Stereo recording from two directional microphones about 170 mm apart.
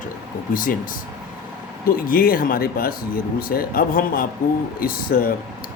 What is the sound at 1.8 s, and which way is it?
Speech, 60° left (ahead or behind).